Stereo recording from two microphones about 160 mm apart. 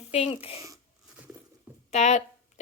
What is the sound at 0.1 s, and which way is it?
Speech, 40° left (ahead or behind).